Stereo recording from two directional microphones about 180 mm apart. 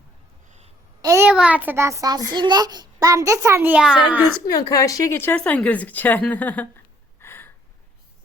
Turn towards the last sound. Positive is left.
turn(degrees=10)  # may be behind; listen again after turning